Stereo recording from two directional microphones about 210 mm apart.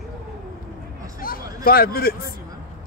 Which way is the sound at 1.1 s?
45° left (ahead or behind).